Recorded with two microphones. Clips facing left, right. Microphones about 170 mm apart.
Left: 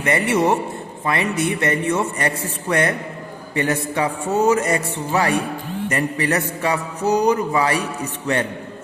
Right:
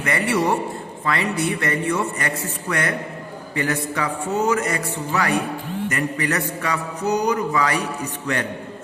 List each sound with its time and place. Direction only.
0.0 s a man's voice: 25° left (ahead or behind)